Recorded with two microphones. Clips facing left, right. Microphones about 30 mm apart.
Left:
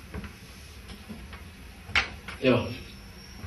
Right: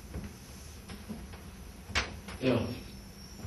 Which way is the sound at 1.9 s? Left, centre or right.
Left.